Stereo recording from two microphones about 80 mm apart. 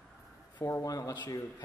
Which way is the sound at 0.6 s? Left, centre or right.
Left.